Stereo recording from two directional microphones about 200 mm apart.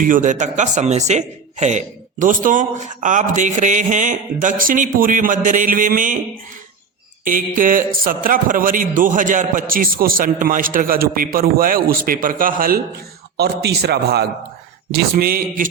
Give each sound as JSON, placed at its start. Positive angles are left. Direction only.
{"t": 0.0, "sound": "speech", "side_deg": -40}
{"t": 7.3, "sound": "a man's voice", "side_deg": -45}